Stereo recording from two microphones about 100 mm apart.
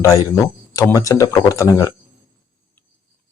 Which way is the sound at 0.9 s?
35° left (ahead or behind).